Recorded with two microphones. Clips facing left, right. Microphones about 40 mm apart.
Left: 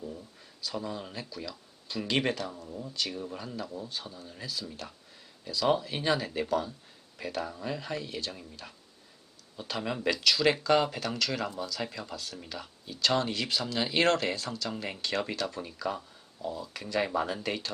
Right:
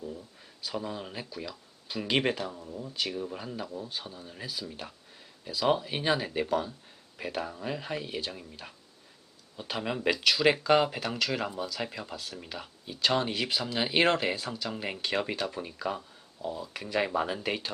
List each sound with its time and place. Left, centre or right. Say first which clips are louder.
0.6 s speech: right 1 dB; centre